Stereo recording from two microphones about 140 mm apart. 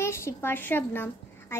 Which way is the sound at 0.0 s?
20° left (ahead or behind).